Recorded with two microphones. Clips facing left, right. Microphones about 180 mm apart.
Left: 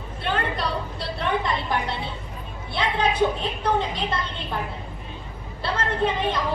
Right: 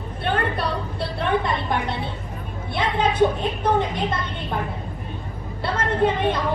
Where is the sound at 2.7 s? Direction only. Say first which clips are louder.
Right 2 dB; 20° right (ahead or behind).